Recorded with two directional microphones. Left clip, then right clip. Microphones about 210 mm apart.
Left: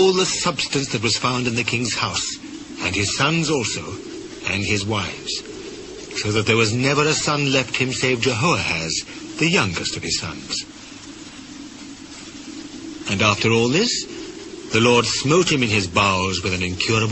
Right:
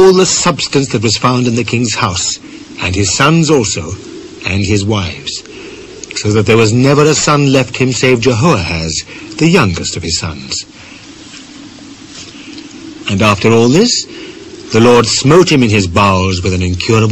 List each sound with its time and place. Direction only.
0.1 s a man's voice: 25° left (ahead or behind)
6.2 s a man's voice: 25° left (ahead or behind)
13.0 s a man's voice: 25° left (ahead or behind)